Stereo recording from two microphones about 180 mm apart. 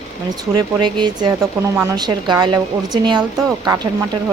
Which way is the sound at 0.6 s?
25° right (ahead or behind).